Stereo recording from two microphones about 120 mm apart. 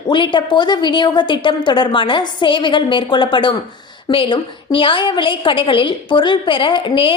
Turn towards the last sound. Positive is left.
turn(degrees=45)  # may be behind; listen again after turning